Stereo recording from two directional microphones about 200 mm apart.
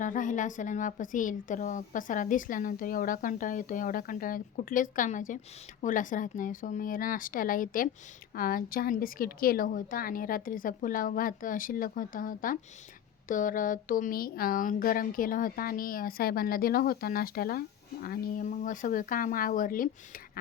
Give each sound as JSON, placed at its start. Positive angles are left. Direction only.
{"t": 0.0, "sound": "a woman's voice", "side_deg": 40}